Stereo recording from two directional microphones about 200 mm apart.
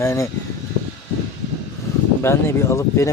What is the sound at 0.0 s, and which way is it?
Speech, 15° left (ahead or behind).